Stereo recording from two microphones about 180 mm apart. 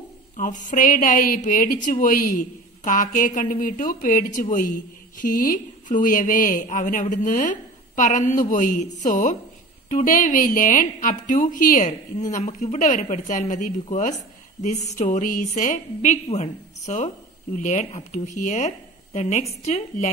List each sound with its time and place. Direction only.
0.4 s speech: 45° left (ahead or behind)
14.9 s a woman's voice: 40° left (ahead or behind)